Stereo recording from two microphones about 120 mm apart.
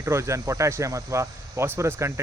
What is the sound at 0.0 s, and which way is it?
Speech, 25° right (ahead or behind).